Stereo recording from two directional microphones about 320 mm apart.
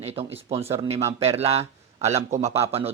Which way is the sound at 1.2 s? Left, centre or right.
Centre.